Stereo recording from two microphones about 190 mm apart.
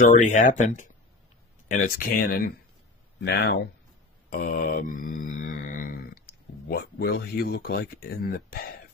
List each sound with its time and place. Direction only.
0.0 s speech: 40° left (ahead or behind)
3.2 s speech: 60° left (ahead or behind)
4.3 s mantra: 50° left (ahead or behind)
6.7 s speech: 55° left (ahead or behind)